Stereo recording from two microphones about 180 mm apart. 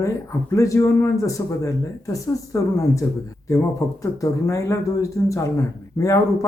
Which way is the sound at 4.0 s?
20° left (ahead or behind).